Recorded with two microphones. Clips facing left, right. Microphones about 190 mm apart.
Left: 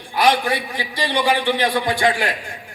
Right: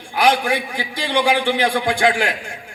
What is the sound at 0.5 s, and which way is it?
A man's voice, 45° right (ahead or behind).